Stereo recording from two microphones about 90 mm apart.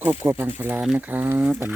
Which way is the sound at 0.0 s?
25° right (ahead or behind).